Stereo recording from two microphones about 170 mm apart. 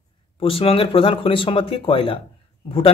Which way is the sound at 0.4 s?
35° left (ahead or behind).